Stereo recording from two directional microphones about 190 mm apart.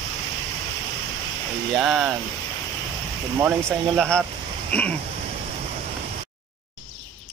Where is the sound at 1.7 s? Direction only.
Centre (ahead or behind).